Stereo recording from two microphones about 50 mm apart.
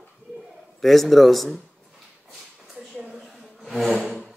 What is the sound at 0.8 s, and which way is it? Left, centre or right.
Speech, centre.